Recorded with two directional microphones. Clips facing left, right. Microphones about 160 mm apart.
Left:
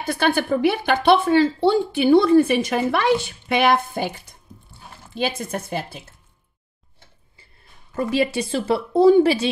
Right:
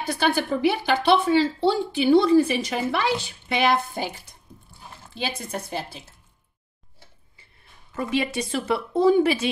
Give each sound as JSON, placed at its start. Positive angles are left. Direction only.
{"t": 0.1, "sound": "speech", "side_deg": 55}
{"t": 5.1, "sound": "a woman's voice", "side_deg": 55}
{"t": 7.9, "sound": "speech", "side_deg": 35}